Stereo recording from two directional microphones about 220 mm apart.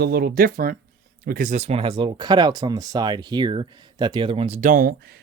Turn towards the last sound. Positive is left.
turn(degrees=-40)  # may be behind; listen again after turning